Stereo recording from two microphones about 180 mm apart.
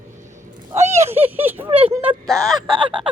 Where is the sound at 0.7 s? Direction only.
40° right (ahead or behind).